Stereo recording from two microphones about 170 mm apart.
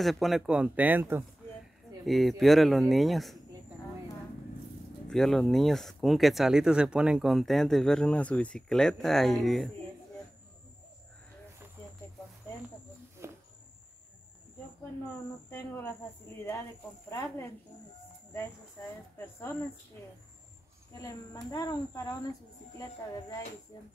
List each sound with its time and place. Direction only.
0.0 s speech: centre (ahead or behind)
2.0 s speech: centre (ahead or behind)
5.1 s speech: centre (ahead or behind)
13.2 s a sound: 15° right (ahead or behind)
15.5 s speech: 15° left (ahead or behind)
17.1 s speech: 15° left (ahead or behind)
19.1 s speech: 10° left (ahead or behind)
21.0 s a woman's voice: 20° left (ahead or behind)